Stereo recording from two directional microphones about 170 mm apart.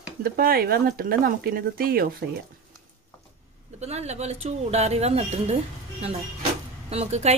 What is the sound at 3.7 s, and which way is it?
Speech, 40° right (ahead or behind).